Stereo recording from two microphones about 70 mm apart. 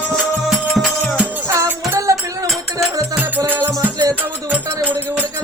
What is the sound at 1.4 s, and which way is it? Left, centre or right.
Music, right.